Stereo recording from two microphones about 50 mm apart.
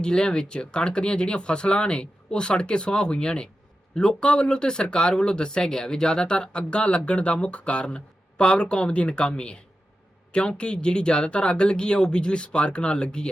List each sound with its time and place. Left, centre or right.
0.0 s speech: centre